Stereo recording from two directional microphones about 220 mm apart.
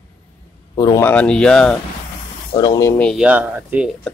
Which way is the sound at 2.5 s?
20° left (ahead or behind).